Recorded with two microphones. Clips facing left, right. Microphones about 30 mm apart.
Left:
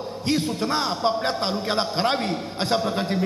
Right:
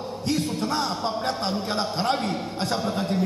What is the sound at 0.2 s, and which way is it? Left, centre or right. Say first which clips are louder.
A man's voice: left 2 dB; left.